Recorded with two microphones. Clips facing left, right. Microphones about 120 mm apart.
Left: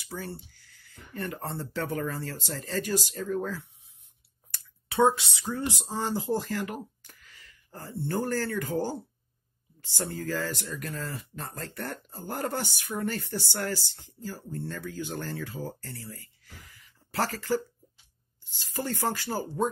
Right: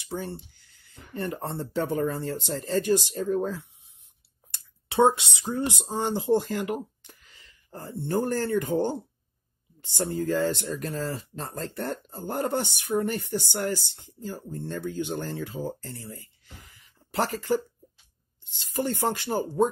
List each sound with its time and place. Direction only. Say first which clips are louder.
0.0 s speech: right 4 dB; 20° right (ahead or behind)
4.8 s speech: right 2 dB; 25° right (ahead or behind)